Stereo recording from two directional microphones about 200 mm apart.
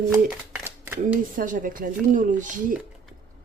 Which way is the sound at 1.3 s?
40° right (ahead or behind).